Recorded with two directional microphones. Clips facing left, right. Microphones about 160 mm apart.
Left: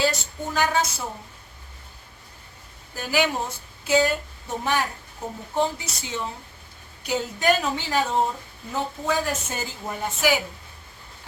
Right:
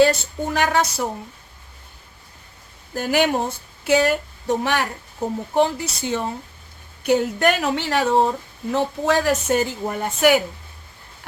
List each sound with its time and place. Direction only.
0.0 s a woman's voice: 60° right (ahead or behind)
2.9 s a woman's voice: 55° right (ahead or behind)
3.8 s a woman's voice: 70° right (ahead or behind)
5.5 s a woman's voice: 65° right (ahead or behind)